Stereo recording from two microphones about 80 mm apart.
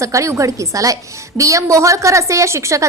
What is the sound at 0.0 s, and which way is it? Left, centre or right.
A woman's voice, right.